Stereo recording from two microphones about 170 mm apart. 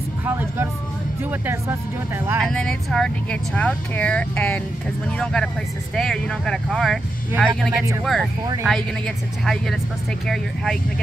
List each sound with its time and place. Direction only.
0.2 s speech: 10° right (ahead or behind)
2.4 s speech: 5° left (ahead or behind)